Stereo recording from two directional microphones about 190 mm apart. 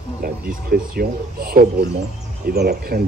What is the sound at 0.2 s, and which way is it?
A man's voice, 50° right (ahead or behind).